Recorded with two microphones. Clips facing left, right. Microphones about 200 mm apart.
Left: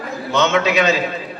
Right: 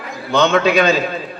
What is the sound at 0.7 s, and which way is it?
Speech, 35° right (ahead or behind).